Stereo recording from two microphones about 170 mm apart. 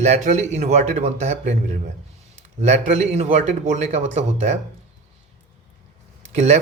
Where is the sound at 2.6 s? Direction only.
40° right (ahead or behind).